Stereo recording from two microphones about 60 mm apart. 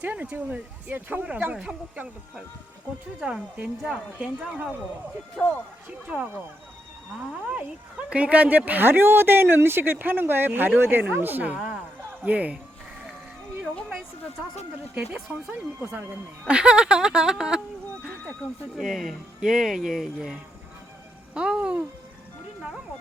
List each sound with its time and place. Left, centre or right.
0.0 s speech: right
4.2 s speech: centre
5.4 s speech: centre
7.5 s speech: right
11.5 s a sound: centre
12.2 s speech: right
14.9 s speech: centre
17.9 s neigh: left
18.8 s speech: centre